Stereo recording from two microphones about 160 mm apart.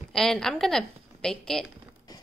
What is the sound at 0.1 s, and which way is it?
A woman's voice, 5° left (ahead or behind).